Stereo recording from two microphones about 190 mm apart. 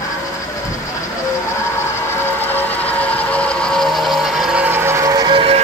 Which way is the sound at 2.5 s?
10° left (ahead or behind).